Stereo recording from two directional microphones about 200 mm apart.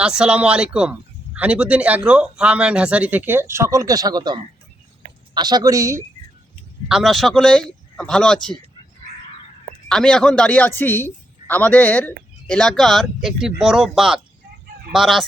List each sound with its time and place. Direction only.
0.0 s a woman's voice: 5° right (ahead or behind)
6.8 s speech: centre (ahead or behind)
9.9 s a man's voice: 5° left (ahead or behind)